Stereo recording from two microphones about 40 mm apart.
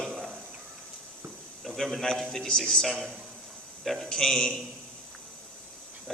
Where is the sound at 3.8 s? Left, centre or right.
Centre.